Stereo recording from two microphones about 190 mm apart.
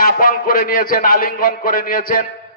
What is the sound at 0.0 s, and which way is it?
A man's voice, 45° left (ahead or behind).